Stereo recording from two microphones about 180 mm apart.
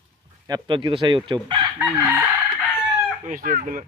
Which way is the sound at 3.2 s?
50° right (ahead or behind).